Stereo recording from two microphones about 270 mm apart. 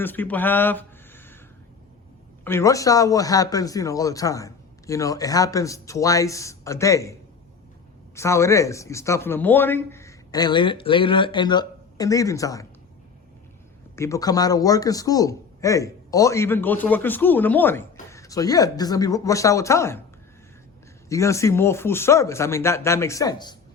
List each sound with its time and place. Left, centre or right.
0.0 s speech: centre
2.4 s a man's voice: centre
13.9 s a man's voice: centre
21.1 s a man's voice: centre